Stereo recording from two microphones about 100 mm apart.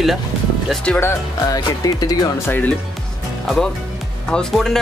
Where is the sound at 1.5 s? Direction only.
40° left (ahead or behind).